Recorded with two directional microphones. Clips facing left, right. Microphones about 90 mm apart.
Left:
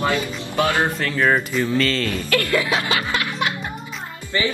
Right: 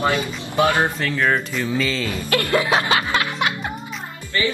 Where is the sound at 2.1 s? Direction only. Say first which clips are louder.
Right 4 dB; 25° right (ahead or behind).